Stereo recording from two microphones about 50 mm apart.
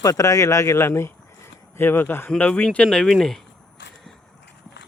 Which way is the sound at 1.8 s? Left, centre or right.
Left.